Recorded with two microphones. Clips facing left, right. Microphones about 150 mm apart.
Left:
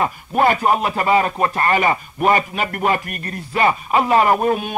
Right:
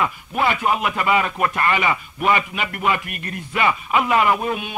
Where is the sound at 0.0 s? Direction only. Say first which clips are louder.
Left 4 dB; 40° left (ahead or behind).